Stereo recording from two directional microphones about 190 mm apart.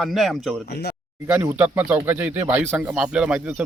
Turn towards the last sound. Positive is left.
turn(degrees=-5)  # may be behind; listen again after turning